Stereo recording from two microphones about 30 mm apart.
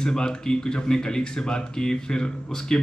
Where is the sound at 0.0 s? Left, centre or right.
Left.